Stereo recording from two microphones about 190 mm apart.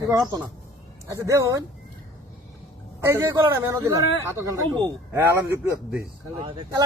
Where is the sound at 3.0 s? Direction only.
10° right (ahead or behind).